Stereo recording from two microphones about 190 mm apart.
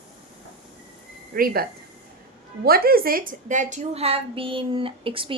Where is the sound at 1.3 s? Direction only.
50° right (ahead or behind).